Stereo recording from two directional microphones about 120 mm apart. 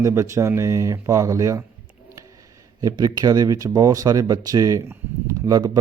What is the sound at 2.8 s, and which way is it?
Speech, 35° right (ahead or behind).